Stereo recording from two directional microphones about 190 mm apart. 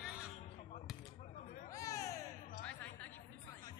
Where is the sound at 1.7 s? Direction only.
15° left (ahead or behind).